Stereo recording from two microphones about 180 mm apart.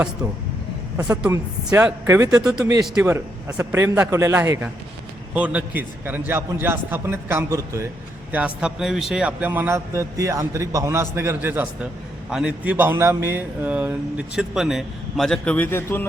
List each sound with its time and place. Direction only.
1.3 s a man's voice: 15° right (ahead or behind)
2.4 s speech: 5° right (ahead or behind)
3.6 s a man's voice: 15° right (ahead or behind); by 16.0 s 10° left (ahead or behind)